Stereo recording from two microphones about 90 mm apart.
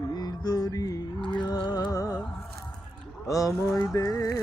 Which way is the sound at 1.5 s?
55° left (ahead or behind).